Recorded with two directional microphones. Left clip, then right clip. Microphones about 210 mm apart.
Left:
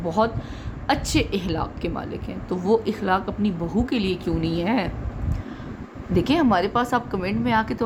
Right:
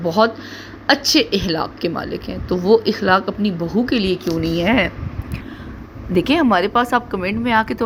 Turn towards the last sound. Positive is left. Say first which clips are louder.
# right 5 dB
turn(degrees=-20)  # may be behind; listen again after turning